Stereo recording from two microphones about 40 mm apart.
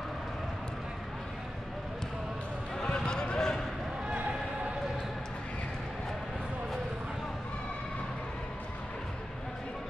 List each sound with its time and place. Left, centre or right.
2.8 s basketball bounce: centre